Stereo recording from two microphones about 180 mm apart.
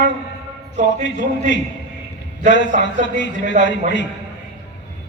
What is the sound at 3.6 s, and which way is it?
Speech, 40° right (ahead or behind).